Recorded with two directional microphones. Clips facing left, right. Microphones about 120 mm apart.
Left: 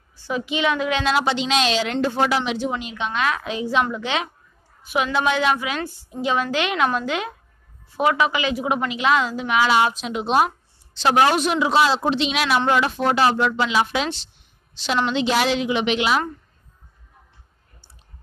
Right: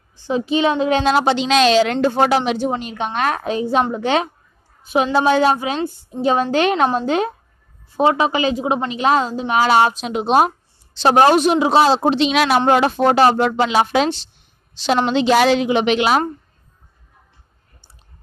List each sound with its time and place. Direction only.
0.3 s a woman's voice: 35° right (ahead or behind); by 16.3 s 50° right (ahead or behind)